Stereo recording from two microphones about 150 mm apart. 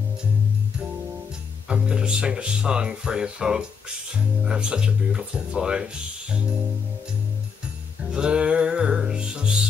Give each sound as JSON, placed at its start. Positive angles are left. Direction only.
{"t": 1.7, "sound": "speech", "side_deg": -5}
{"t": 8.1, "sound": "music", "side_deg": -5}